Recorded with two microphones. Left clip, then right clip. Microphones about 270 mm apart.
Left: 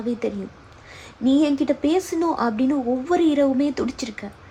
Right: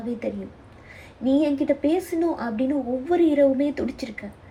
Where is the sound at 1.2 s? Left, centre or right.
Centre.